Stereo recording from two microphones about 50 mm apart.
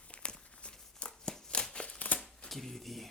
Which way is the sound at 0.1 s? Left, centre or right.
Centre.